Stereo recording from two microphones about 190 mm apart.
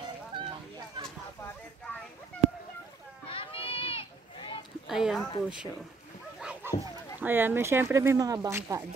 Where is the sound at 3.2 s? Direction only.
30° left (ahead or behind).